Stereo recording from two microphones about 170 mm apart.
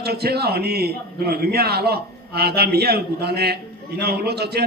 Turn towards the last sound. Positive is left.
turn(degrees=-75)  # may be behind; listen again after turning